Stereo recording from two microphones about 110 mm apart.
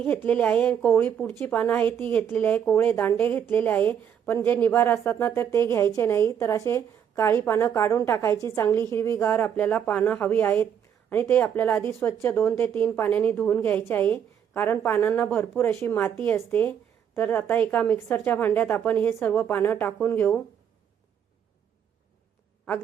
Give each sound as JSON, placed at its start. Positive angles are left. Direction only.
{"t": 0.0, "sound": "a woman's voice", "side_deg": 15}